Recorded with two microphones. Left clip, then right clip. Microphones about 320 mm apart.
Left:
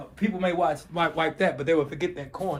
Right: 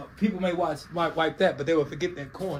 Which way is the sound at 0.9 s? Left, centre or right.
Left.